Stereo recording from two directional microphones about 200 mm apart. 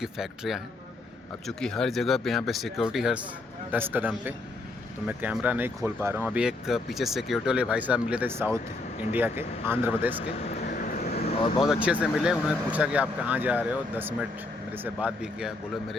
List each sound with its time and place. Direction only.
0.0 s speech: centre (ahead or behind)
10.8 s vehicle: 45° left (ahead or behind)
11.6 s speech: 5° right (ahead or behind)